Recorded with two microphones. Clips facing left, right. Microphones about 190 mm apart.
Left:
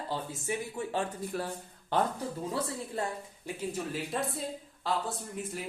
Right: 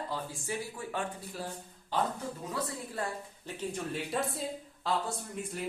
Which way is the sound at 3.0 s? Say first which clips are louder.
Left 1 dB; 25° left (ahead or behind).